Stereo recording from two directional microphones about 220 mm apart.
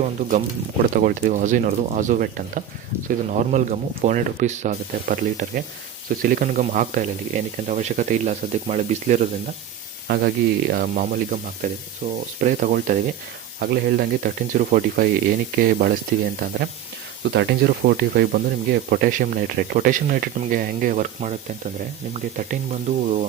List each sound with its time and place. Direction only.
0.0 s speech: 35° right (ahead or behind)
10.1 s speech: 45° right (ahead or behind)
17.3 s speech: 50° right (ahead or behind); by 23.2 s 30° right (ahead or behind)